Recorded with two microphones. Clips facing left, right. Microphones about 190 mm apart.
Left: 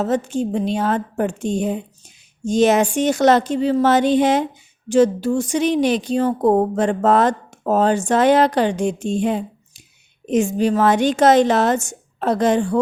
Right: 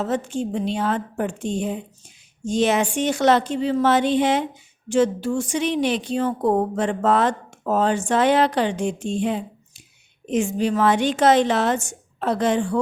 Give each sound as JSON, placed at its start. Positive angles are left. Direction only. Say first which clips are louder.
{"t": 0.0, "sound": "a woman's voice", "louder": "left 4 dB", "side_deg": 40}